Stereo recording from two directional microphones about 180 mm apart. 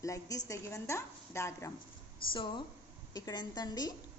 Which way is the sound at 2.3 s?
30° left (ahead or behind).